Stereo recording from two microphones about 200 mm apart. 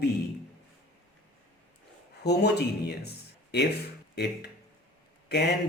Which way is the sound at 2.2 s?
55° left (ahead or behind).